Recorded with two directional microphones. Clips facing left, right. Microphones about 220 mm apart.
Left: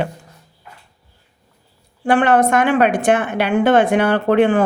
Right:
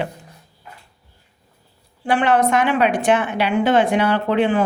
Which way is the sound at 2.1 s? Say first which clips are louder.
Left 3 dB; 50° left (ahead or behind).